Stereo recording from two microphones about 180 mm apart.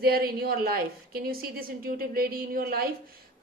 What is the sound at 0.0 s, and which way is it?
A woman's voice, 60° right (ahead or behind).